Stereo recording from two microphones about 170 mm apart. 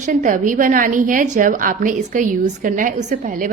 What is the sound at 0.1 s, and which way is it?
A woman's voice, 50° right (ahead or behind).